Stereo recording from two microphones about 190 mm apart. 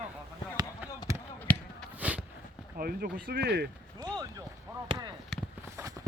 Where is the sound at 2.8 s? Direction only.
50° right (ahead or behind).